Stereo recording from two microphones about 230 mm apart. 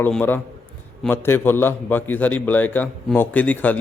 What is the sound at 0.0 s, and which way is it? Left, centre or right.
A man's voice, centre.